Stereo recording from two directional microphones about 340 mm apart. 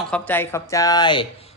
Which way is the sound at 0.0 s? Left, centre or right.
Centre.